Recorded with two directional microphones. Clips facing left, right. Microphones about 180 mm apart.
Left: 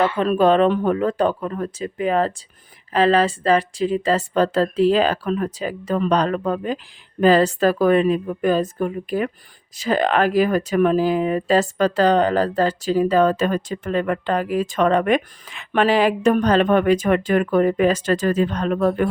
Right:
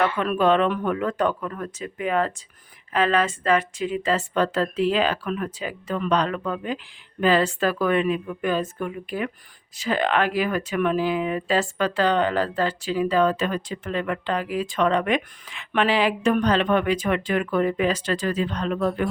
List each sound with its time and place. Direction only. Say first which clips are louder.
0.0 s a woman's voice: left 4 dB; 30° left (ahead or behind); by 19.0 s 50° left (ahead or behind)